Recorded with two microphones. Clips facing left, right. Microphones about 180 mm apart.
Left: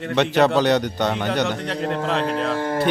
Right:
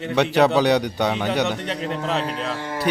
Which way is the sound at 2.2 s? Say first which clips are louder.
Left 5 dB; 55° left (ahead or behind).